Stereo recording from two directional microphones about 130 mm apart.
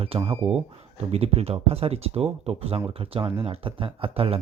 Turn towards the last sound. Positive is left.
turn(degrees=-45)  # may be behind; listen again after turning